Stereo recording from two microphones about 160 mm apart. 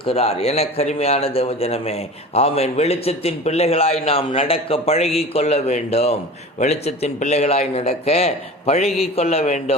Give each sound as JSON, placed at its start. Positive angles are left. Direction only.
{"t": 0.0, "sound": "a man's voice", "side_deg": 40}